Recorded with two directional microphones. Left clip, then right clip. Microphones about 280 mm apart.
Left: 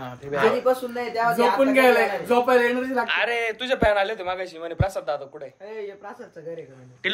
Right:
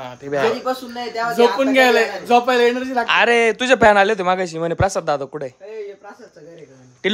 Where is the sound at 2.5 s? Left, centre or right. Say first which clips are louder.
Right 4 dB; right.